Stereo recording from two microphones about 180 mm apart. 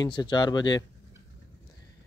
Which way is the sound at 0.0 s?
25° left (ahead or behind).